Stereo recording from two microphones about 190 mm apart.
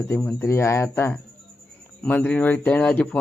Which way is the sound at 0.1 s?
10° left (ahead or behind).